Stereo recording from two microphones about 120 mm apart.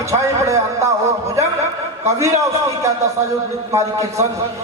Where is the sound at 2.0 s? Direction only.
25° right (ahead or behind).